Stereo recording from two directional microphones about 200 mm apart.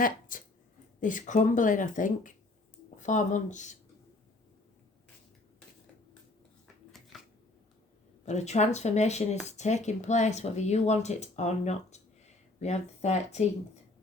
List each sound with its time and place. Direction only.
0.0 s speech: 45° left (ahead or behind)
7.1 s shuffling cards: centre (ahead or behind)
8.2 s speech: 35° left (ahead or behind)